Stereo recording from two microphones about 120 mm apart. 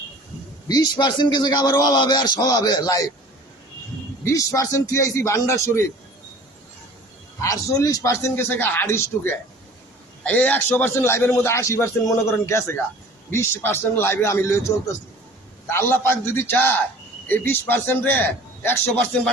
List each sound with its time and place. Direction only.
0.7 s a man's voice: 35° left (ahead or behind)
4.2 s a man's voice: 25° left (ahead or behind)
7.4 s a man's voice: 25° left (ahead or behind)
15.7 s a man's voice: 20° left (ahead or behind)